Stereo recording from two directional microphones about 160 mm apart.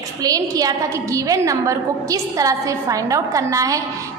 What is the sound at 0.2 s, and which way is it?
A woman's voice, 25° right (ahead or behind).